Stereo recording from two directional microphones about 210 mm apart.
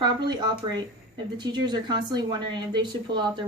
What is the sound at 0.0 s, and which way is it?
Speech, 20° right (ahead or behind).